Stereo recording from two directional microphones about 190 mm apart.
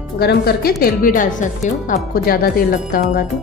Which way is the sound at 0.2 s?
55° left (ahead or behind).